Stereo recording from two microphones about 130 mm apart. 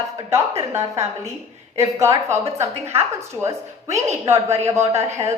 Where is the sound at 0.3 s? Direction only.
20° right (ahead or behind).